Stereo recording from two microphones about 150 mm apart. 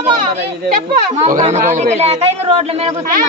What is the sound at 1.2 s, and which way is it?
A man's voice, 55° right (ahead or behind).